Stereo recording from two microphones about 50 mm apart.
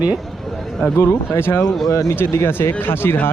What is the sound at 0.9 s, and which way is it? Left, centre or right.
Speech, left.